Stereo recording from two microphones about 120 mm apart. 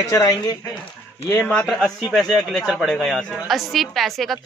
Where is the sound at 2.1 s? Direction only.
Centre (ahead or behind).